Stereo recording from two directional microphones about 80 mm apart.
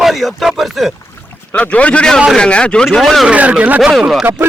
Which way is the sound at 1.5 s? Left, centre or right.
Centre.